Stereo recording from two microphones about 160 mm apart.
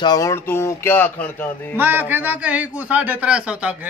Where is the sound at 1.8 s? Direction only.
10° right (ahead or behind).